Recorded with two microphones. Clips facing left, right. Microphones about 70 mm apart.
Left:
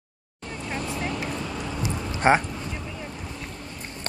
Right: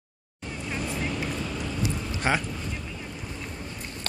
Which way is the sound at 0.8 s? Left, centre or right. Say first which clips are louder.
Even; centre.